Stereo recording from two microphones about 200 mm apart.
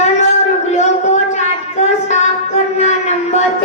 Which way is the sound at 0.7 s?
35° left (ahead or behind).